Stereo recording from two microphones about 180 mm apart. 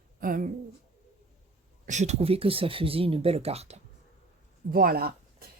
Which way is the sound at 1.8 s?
40° right (ahead or behind).